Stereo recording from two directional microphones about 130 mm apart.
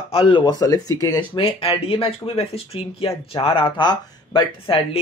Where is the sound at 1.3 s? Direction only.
45° left (ahead or behind).